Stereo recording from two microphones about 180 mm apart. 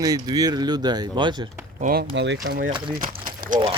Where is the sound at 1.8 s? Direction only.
55° right (ahead or behind).